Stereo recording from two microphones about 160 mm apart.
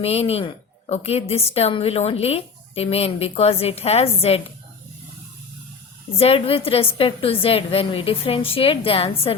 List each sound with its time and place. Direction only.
0.0 s a woman's voice: 40° left (ahead or behind)
6.1 s a woman's voice: 40° left (ahead or behind)